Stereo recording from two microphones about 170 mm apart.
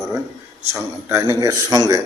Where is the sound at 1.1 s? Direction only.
15° right (ahead or behind).